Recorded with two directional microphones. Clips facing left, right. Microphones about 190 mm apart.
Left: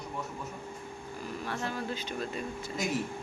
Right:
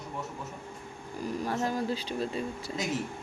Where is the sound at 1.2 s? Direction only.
40° right (ahead or behind).